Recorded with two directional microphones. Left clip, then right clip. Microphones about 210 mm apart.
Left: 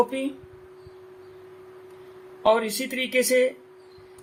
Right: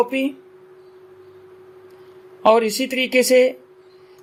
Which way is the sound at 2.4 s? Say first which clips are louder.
Right 6 dB; 35° right (ahead or behind).